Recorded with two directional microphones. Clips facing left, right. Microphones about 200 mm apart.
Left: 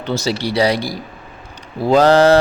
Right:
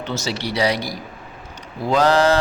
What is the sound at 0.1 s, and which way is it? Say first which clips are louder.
Mantra: left 7 dB; 35° left (ahead or behind).